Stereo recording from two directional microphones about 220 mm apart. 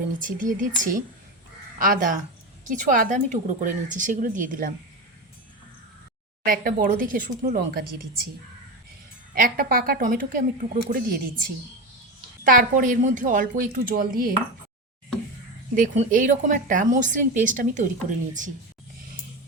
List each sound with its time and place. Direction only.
0.2 s a woman's voice: 35° right (ahead or behind)
6.4 s a woman's voice: 40° right (ahead or behind)
9.3 s a woman's voice: 40° right (ahead or behind)
15.7 s a woman's voice: 35° right (ahead or behind)